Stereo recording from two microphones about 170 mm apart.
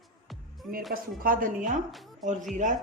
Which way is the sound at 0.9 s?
55° right (ahead or behind).